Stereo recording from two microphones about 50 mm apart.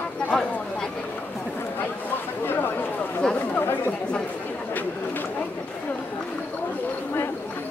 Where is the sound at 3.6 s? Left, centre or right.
Left.